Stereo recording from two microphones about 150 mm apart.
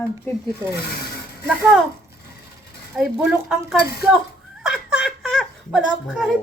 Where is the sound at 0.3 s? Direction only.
15° left (ahead or behind).